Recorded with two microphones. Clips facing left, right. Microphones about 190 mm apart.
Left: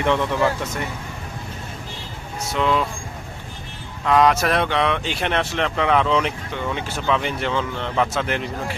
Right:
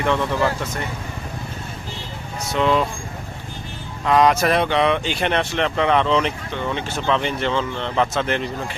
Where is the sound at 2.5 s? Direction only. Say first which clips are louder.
Right 2 dB; centre (ahead or behind).